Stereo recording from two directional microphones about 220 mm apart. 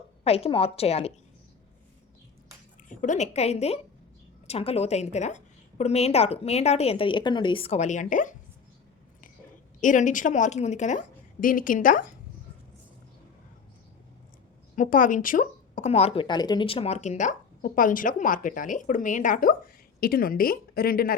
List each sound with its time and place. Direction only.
0.3 s a woman's voice: 25° left (ahead or behind)
2.9 s a woman's voice: 35° left (ahead or behind)
9.8 s a woman's voice: 35° left (ahead or behind)
14.8 s a woman's voice: 35° left (ahead or behind)